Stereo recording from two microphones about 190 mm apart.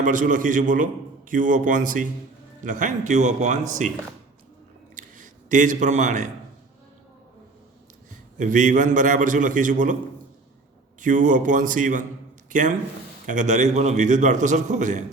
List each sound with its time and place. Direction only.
0.0 s a man's voice: 45° right (ahead or behind)
4.9 s a sound: 40° right (ahead or behind)
8.4 s a man's voice: 40° right (ahead or behind)
11.0 s a man's voice: 40° right (ahead or behind)